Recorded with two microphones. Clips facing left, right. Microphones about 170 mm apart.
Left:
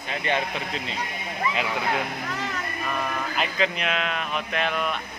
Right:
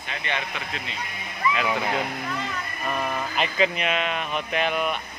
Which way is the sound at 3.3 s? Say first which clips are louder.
Right 3 dB; 5° right (ahead or behind).